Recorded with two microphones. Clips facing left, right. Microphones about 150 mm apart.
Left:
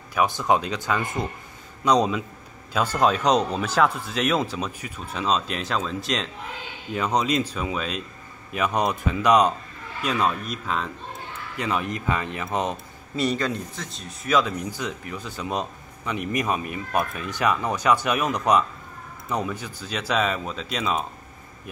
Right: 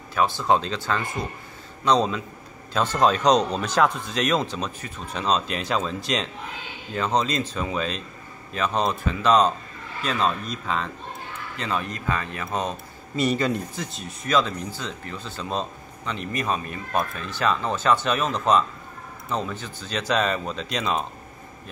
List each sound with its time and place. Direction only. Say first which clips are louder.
0.1 s a man's voice: even; 15° left (ahead or behind); by 6.2 s centre (ahead or behind)
6.9 s speech: left 1 dB; 10° left (ahead or behind)
11.5 s speech: left 2 dB; 15° left (ahead or behind)
13.1 s a man's voice: right 2 dB; 5° right (ahead or behind)